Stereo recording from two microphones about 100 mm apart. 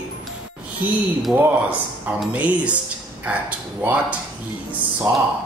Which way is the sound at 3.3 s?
15° right (ahead or behind).